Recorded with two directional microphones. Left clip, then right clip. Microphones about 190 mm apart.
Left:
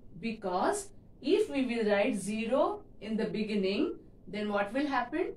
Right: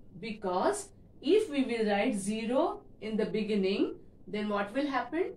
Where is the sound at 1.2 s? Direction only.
15° left (ahead or behind).